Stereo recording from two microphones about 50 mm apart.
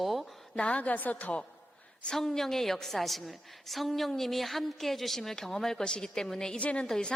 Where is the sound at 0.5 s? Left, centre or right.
Left.